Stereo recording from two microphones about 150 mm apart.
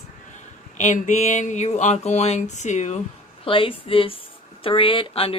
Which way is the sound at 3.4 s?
35° left (ahead or behind).